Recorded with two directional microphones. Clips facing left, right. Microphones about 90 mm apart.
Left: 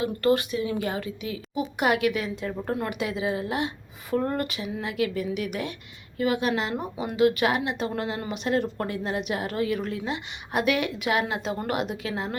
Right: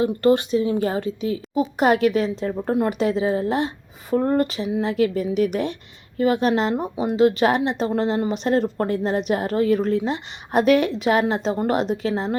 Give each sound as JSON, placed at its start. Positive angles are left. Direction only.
{"t": 0.0, "sound": "a woman's voice", "side_deg": -30}
{"t": 6.9, "sound": "a woman's voice", "side_deg": -25}